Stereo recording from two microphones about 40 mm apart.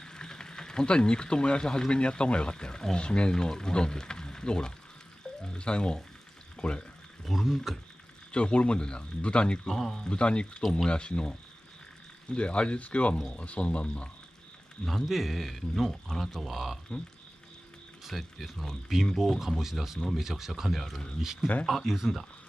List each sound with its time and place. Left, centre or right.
0.0 s speech: centre
7.2 s speech: centre
8.3 s speech: left
9.7 s speech: centre
10.0 s speech: left
14.9 s speech: centre
16.3 s speech: centre
18.0 s speech: centre
21.6 s speech: centre